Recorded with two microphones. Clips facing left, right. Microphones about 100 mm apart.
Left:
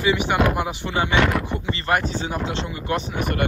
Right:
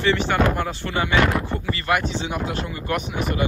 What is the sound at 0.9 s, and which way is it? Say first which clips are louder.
Speech: left 1 dB; 25° left (ahead or behind).